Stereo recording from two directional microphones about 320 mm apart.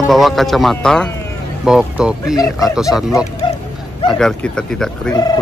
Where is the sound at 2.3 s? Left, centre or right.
Centre.